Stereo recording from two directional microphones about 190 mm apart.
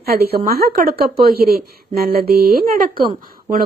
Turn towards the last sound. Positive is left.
turn(degrees=-45)  # may be behind; listen again after turning